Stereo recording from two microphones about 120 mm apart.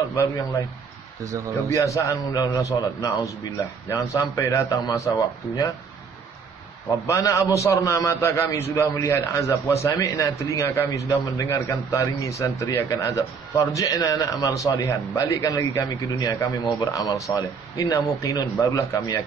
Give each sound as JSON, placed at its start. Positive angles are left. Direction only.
{"t": 1.2, "sound": "speech", "side_deg": -30}
{"t": 1.8, "sound": "a man's voice", "side_deg": 25}
{"t": 7.1, "sound": "a man's voice", "side_deg": 25}